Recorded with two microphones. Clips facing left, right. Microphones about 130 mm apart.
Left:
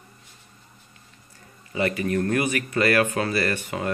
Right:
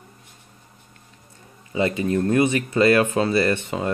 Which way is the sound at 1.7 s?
20° right (ahead or behind).